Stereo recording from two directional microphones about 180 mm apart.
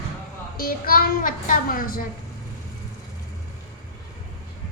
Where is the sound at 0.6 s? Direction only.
55° left (ahead or behind).